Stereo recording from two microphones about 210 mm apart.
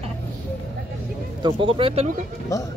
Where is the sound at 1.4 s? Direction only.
25° right (ahead or behind).